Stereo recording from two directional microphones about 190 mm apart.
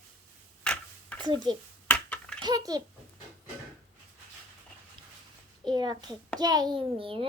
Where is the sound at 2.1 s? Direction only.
5° left (ahead or behind).